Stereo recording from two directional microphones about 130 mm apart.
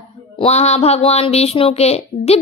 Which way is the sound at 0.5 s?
55° left (ahead or behind).